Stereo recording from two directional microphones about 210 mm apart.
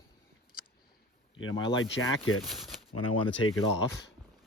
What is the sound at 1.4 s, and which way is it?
Speech, 65° left (ahead or behind).